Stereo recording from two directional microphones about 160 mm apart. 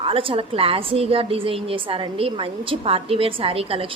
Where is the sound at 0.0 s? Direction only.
35° right (ahead or behind).